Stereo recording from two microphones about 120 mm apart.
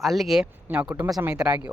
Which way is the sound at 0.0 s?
Centre (ahead or behind).